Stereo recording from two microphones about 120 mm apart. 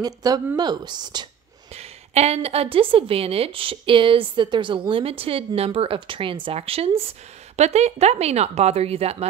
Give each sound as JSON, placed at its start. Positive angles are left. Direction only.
{"t": 0.0, "sound": "speech", "side_deg": -30}
{"t": 1.8, "sound": "a woman's voice", "side_deg": -60}
{"t": 7.5, "sound": "speech", "side_deg": -65}